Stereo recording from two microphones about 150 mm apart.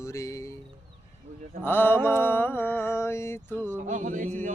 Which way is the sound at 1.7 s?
15° left (ahead or behind).